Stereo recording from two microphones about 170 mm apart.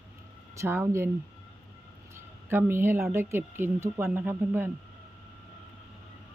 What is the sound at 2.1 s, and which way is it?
Speech, 15° right (ahead or behind).